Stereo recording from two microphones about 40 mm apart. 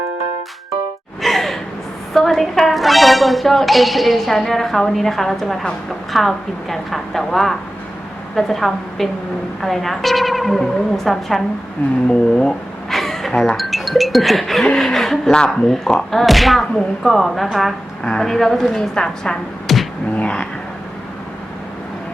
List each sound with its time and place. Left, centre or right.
1.2 s gasp: centre
2.1 s a woman's voice: centre
12.0 s a woman's voice: centre
12.9 s a sound: centre
13.6 s a woman's voice: centre
16.2 s a woman's voice: centre
19.6 s music: centre